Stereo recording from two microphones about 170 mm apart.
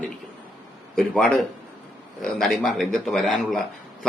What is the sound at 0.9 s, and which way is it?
A man's voice, centre (ahead or behind).